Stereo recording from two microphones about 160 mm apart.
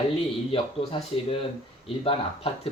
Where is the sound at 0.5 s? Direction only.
35° left (ahead or behind).